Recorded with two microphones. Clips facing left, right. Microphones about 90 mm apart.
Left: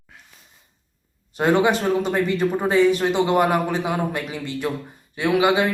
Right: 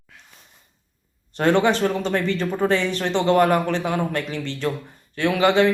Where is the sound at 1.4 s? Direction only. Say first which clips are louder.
Even; 10° left (ahead or behind).